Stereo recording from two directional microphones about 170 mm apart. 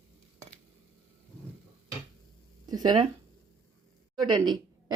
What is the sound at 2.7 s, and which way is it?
Speech, 25° right (ahead or behind).